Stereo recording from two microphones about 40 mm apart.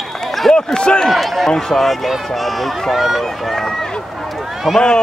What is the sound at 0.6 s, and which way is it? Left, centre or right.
Speech, left.